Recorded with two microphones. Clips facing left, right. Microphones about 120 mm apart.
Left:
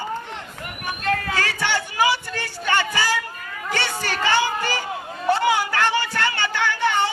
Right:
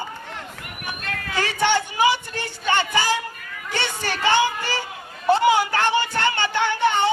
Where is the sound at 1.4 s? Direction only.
20° right (ahead or behind).